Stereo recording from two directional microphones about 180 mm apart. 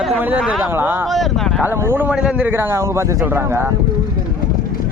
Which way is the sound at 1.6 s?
10° right (ahead or behind).